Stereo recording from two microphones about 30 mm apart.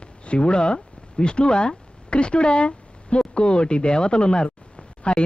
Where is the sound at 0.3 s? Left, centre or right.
Left.